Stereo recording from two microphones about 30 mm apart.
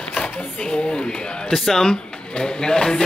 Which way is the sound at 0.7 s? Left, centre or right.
Left.